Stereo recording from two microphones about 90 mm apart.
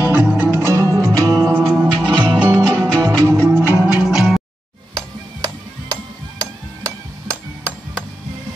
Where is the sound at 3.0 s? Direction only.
35° right (ahead or behind).